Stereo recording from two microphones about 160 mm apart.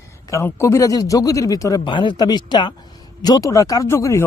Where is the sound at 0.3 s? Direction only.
15° left (ahead or behind).